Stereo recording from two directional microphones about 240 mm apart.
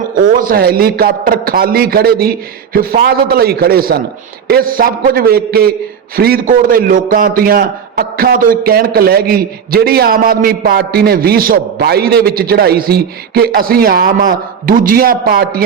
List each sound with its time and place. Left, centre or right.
0.2 s a man's voice: right